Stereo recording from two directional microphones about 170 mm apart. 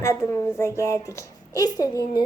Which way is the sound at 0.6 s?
15° left (ahead or behind).